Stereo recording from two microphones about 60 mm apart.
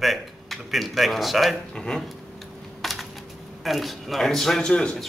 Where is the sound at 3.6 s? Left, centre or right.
Centre.